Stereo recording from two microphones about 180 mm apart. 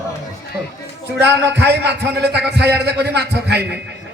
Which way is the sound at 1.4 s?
70° right (ahead or behind).